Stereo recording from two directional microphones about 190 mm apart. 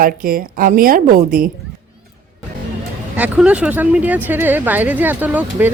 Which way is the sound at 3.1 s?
10° right (ahead or behind).